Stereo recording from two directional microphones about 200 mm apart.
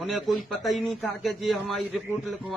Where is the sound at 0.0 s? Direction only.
Centre (ahead or behind).